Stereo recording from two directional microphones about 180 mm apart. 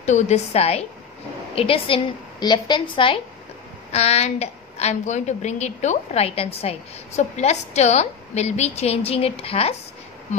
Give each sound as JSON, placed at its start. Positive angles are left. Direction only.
{"t": 0.0, "sound": "a woman's voice", "side_deg": 40}